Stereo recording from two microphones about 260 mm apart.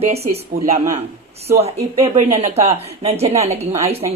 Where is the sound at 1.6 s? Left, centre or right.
Right.